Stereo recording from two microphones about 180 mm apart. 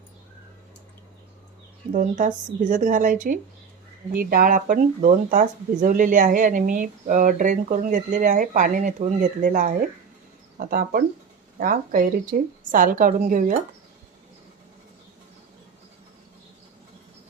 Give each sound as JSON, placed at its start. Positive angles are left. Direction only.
{"t": 1.9, "sound": "speech", "side_deg": -45}